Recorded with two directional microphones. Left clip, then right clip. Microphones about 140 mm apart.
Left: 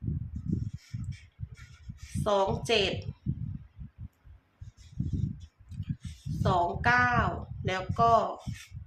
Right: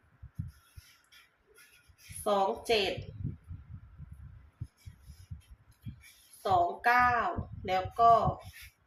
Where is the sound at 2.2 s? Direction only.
50° left (ahead or behind).